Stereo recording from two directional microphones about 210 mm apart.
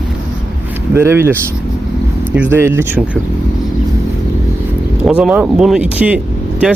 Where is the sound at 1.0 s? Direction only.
10° right (ahead or behind).